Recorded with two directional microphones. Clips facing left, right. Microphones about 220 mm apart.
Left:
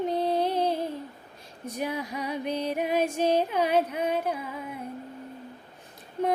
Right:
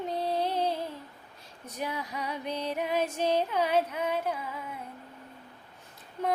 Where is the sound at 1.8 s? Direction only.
15° left (ahead or behind).